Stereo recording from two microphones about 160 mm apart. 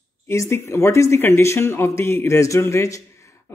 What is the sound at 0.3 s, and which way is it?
Speech, 15° left (ahead or behind).